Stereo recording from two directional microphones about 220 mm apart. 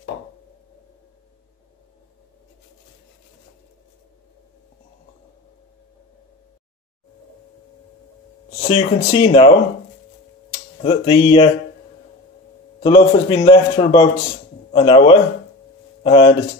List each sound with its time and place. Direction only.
8.7 s a man's voice: 25° left (ahead or behind)
10.8 s a man's voice: 25° left (ahead or behind)
12.8 s a man's voice: 20° left (ahead or behind)